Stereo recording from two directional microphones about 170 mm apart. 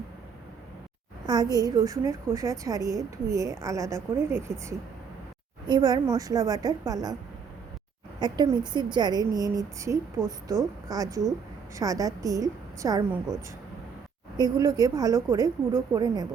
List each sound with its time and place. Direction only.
1.3 s a woman's voice: 25° right (ahead or behind)
5.6 s a woman's voice: 25° right (ahead or behind)
8.2 s a woman's voice: 25° right (ahead or behind)
14.3 s a woman's voice: 25° right (ahead or behind)